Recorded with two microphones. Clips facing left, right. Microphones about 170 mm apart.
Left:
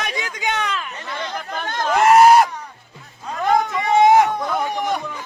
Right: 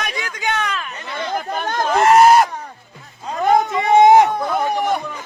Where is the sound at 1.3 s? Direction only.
45° right (ahead or behind).